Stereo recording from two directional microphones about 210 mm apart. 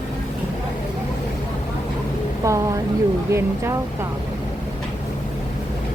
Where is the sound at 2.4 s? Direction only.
15° right (ahead or behind).